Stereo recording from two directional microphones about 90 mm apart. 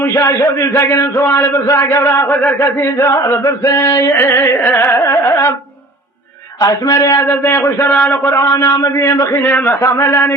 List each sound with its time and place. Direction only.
0.0 s a man's voice: 40° left (ahead or behind)
4.1 s carnatic music: 25° left (ahead or behind)
6.6 s a man's voice: 45° left (ahead or behind)
7.3 s carnatic music: 25° left (ahead or behind)
8.4 s a man's voice: 35° left (ahead or behind)
9.4 s carnatic music: 20° left (ahead or behind)
9.8 s a man's voice: 35° left (ahead or behind)